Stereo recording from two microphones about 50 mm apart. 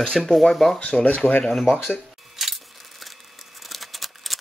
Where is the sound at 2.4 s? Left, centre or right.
Centre.